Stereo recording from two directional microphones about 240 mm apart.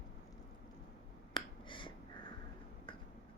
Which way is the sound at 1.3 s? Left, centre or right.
Left.